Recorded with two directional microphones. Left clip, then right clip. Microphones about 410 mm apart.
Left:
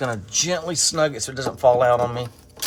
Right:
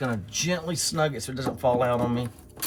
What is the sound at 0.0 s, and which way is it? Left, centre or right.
Speech, left.